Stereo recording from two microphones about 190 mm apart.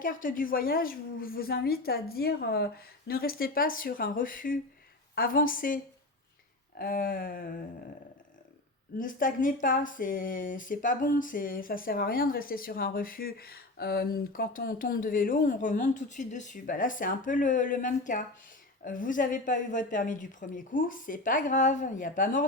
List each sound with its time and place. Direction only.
0.0 s speech: 45° left (ahead or behind)
9.0 s speech: 45° left (ahead or behind)